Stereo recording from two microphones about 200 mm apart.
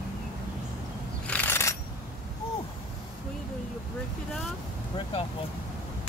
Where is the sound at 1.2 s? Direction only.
10° left (ahead or behind).